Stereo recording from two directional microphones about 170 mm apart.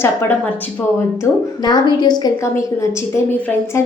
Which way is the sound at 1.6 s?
25° left (ahead or behind).